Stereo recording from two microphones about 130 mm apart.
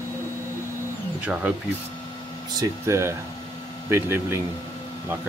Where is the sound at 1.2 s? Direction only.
10° right (ahead or behind).